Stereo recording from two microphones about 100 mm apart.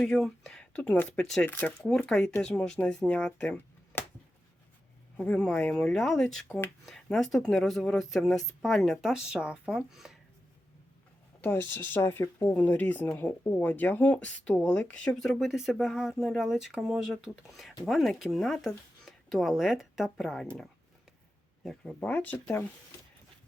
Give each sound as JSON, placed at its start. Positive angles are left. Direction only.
{"t": 0.0, "sound": "speech", "side_deg": 5}
{"t": 1.5, "sound": "speech", "side_deg": 20}
{"t": 2.0, "sound": "speech", "side_deg": 5}
{"t": 5.1, "sound": "speech", "side_deg": 15}
{"t": 11.3, "sound": "a sound", "side_deg": 20}
{"t": 11.7, "sound": "speech", "side_deg": 20}
{"t": 21.6, "sound": "speech", "side_deg": 5}
{"t": 22.0, "sound": "speech", "side_deg": 15}